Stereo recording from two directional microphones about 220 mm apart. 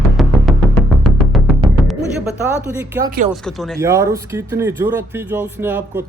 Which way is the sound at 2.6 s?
10° right (ahead or behind).